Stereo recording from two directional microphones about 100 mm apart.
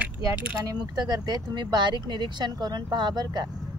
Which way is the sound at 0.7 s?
45° right (ahead or behind).